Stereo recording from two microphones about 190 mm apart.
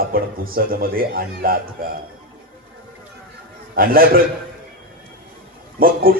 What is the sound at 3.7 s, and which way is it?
Speech, 50° right (ahead or behind).